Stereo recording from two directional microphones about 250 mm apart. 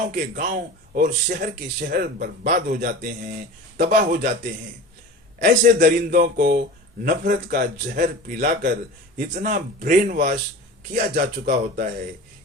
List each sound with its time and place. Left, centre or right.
0.1 s a man's voice: right
5.4 s a man's voice: right